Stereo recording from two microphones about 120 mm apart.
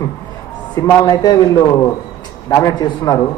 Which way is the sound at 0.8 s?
30° left (ahead or behind).